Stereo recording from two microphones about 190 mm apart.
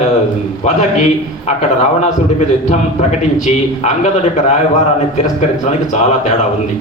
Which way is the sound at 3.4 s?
40° left (ahead or behind).